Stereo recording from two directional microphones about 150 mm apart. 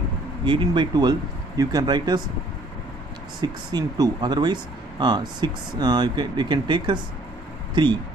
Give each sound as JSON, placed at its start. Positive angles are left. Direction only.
{"t": 0.5, "sound": "speech", "side_deg": -30}
{"t": 3.3, "sound": "speech", "side_deg": -30}